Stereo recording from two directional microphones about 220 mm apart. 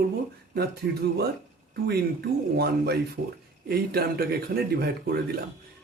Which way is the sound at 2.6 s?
45° right (ahead or behind).